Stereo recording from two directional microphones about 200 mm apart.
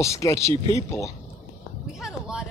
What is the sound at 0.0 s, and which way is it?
Speech, 15° left (ahead or behind).